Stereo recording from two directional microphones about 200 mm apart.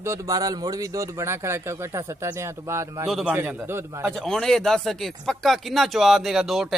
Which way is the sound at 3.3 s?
10° right (ahead or behind).